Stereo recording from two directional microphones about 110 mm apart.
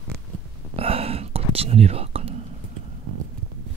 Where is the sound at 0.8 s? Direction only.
60° right (ahead or behind).